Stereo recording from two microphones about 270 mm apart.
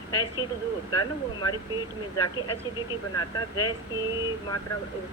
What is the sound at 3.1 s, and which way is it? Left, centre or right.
Speech, centre.